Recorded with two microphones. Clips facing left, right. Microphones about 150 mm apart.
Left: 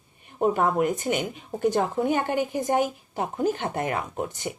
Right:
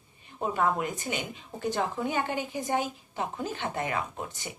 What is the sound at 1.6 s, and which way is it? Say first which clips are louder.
A woman's voice: left 7 dB; 45° left (ahead or behind).